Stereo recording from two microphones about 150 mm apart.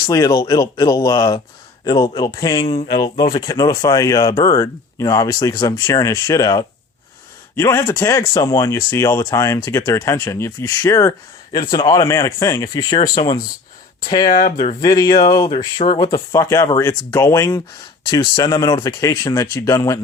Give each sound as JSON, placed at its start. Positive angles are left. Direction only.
{"t": 0.1, "sound": "speech", "side_deg": 25}
{"t": 11.5, "sound": "a man's voice", "side_deg": 35}
{"t": 11.9, "sound": "speech", "side_deg": 20}
{"t": 14.1, "sound": "speech", "side_deg": 25}
{"t": 18.0, "sound": "speech", "side_deg": 30}